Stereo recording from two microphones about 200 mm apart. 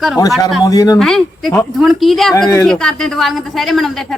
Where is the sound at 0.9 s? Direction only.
Centre (ahead or behind).